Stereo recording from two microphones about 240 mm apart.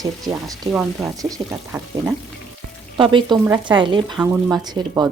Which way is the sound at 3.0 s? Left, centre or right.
Right.